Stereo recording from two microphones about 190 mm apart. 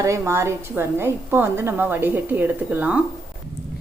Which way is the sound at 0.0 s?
15° right (ahead or behind).